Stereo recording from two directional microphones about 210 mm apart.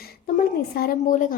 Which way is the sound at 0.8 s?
40° left (ahead or behind).